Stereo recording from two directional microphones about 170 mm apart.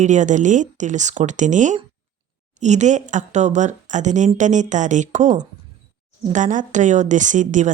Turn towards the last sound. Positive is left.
turn(degrees=-45)  # may be behind; listen again after turning